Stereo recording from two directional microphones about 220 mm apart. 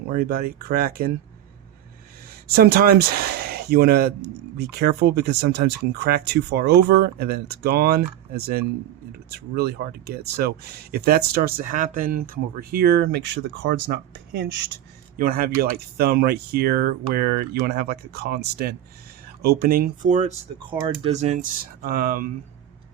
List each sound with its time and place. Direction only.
0.1 s speech: 45° right (ahead or behind)
2.6 s speech: 45° right (ahead or behind)
9.6 s speech: 45° right (ahead or behind)